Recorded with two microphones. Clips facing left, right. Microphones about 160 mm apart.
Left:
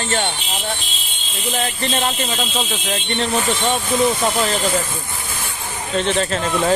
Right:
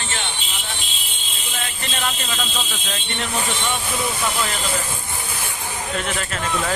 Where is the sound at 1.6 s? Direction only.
35° left (ahead or behind).